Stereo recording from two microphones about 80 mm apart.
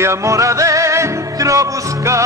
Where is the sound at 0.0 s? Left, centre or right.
Right.